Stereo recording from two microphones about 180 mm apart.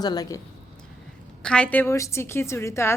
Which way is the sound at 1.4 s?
5° left (ahead or behind).